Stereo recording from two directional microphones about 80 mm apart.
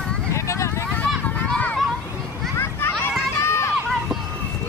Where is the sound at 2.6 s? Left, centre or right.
Left.